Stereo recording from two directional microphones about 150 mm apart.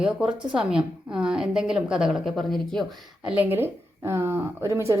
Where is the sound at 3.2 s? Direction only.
10° right (ahead or behind).